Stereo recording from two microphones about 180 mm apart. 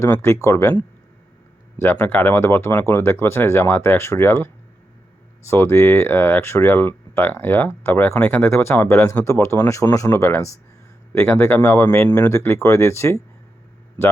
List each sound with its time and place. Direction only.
0.0 s speech: 15° left (ahead or behind)